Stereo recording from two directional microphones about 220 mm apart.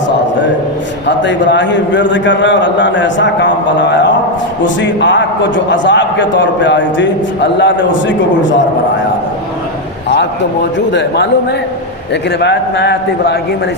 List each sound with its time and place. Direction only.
1.0 s a man's voice: 55° left (ahead or behind)
10.2 s a man's voice: 50° left (ahead or behind)
12.4 s a man's voice: 50° left (ahead or behind)